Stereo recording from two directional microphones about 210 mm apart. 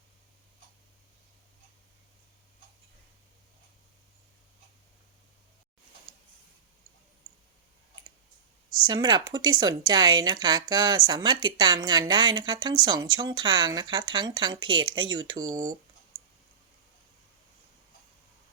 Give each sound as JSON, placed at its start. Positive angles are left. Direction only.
{"t": 8.9, "sound": "speech", "side_deg": -20}